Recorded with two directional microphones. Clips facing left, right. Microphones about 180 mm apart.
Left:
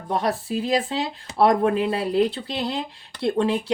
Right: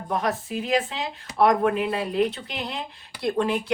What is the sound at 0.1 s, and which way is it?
Speech, 35° left (ahead or behind).